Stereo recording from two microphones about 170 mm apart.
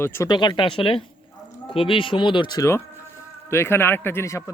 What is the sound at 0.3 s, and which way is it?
Speech, 25° left (ahead or behind).